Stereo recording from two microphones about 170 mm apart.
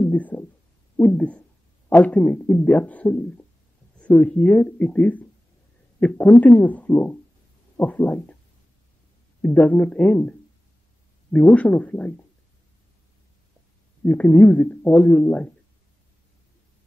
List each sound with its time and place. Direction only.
0.0 s a sound: 10° left (ahead or behind)
0.9 s speech: 10° left (ahead or behind)
9.4 s speech: 10° left (ahead or behind)
11.3 s speech: 5° left (ahead or behind)
14.0 s speech: 10° left (ahead or behind)